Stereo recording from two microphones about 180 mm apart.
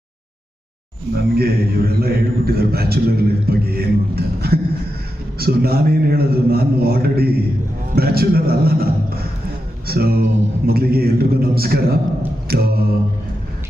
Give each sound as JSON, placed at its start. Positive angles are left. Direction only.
{"t": 1.1, "sound": "a man's voice", "side_deg": -60}